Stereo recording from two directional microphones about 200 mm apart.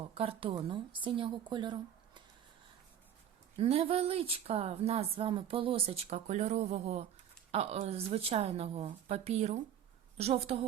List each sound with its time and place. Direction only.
0.0 s a woman's voice: 30° right (ahead or behind)
3.6 s a woman's voice: 30° right (ahead or behind)